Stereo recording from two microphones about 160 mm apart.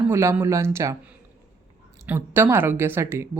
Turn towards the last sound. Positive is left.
turn(degrees=-15)  # may be behind; listen again after turning